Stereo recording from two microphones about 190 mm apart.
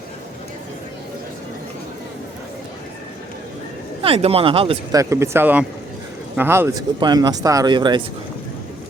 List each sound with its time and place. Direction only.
4.0 s speech: 30° right (ahead or behind)
4.9 s speech: 15° right (ahead or behind)